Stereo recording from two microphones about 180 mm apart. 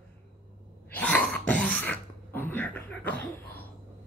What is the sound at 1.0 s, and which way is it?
Throat clearing, 10° left (ahead or behind).